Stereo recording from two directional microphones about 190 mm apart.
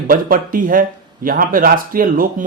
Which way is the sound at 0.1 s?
50° right (ahead or behind).